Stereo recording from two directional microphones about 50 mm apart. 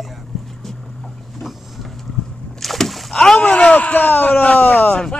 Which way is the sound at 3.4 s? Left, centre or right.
Left.